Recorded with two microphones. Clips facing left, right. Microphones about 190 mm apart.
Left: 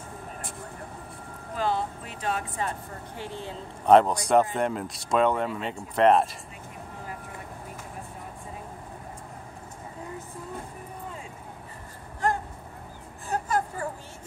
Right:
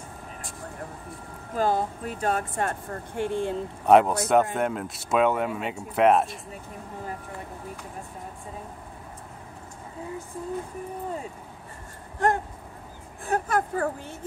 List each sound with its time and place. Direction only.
1.5 s speech: 45° right (ahead or behind)
3.8 s speech: 5° right (ahead or behind)
13.3 s a sound: 60° right (ahead or behind)